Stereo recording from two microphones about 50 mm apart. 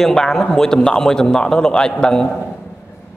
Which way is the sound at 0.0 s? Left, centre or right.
Centre.